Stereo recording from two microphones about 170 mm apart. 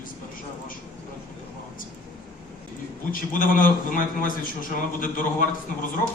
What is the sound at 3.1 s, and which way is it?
A man's voice, 55° left (ahead or behind).